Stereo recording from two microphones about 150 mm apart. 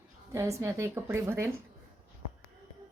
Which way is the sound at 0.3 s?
20° right (ahead or behind).